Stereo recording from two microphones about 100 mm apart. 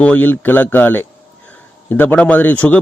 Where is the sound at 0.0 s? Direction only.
15° left (ahead or behind).